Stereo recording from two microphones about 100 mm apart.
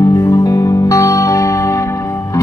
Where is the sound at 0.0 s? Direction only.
35° left (ahead or behind).